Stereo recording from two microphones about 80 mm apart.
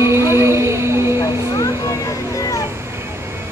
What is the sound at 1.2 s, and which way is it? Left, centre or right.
Music, left.